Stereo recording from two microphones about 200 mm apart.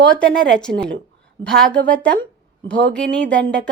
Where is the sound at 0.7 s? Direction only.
65° right (ahead or behind).